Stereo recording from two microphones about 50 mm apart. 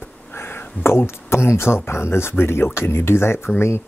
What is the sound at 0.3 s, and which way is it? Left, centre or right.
Speech, left.